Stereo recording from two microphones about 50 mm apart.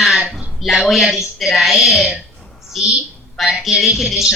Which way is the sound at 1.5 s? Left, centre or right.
Centre.